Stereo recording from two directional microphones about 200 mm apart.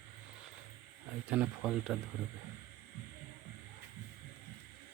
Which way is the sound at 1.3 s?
5° right (ahead or behind).